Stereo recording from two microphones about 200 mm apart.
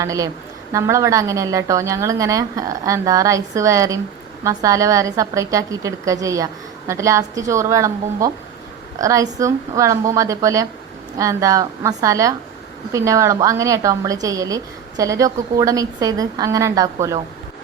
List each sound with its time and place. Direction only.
0.0 s a woman's voice: 15° right (ahead or behind)